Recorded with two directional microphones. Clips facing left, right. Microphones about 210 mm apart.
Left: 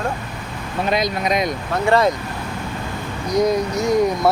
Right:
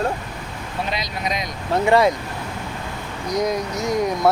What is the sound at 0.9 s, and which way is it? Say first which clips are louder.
Speech: left 9 dB; 50° left (ahead or behind).